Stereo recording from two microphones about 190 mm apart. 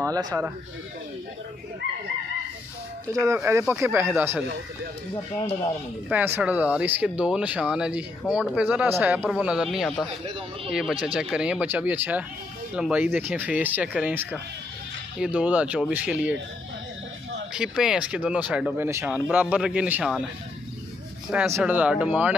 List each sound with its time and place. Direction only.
0.0 s speech: 20° right (ahead or behind)
3.1 s speech: 15° right (ahead or behind)
6.0 s speech: 10° right (ahead or behind)
17.6 s speech: 5° right (ahead or behind)
21.5 s speech: 10° right (ahead or behind)